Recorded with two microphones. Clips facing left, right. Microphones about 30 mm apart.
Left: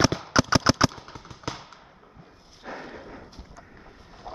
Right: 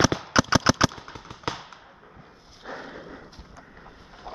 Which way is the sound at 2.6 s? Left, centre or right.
Centre.